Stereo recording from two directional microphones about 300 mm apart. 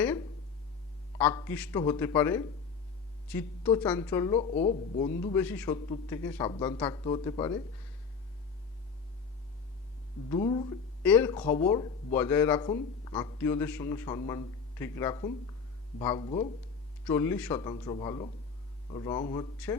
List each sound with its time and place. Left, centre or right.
1.2 s speech: centre
10.2 s speech: centre